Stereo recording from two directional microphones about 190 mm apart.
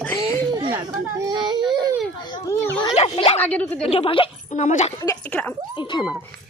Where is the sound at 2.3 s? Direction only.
15° left (ahead or behind).